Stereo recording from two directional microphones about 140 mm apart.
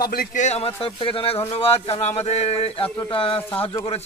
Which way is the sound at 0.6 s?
40° left (ahead or behind).